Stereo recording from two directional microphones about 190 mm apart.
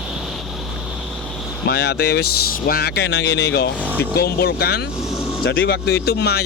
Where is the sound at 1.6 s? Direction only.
60° left (ahead or behind).